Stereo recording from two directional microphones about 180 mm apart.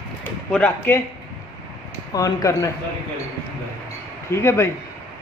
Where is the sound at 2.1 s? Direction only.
20° left (ahead or behind).